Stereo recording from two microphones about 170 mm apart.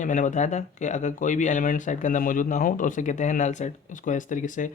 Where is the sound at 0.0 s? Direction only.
50° left (ahead or behind).